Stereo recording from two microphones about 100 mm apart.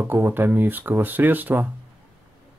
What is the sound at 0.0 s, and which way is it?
Speech, 20° right (ahead or behind).